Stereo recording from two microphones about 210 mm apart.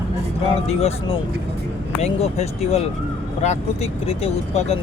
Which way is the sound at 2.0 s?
30° left (ahead or behind).